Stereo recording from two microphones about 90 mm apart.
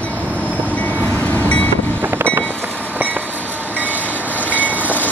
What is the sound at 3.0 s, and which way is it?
Train, 20° right (ahead or behind).